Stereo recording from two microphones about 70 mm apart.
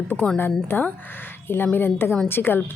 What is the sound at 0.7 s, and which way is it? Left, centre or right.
Speech, left.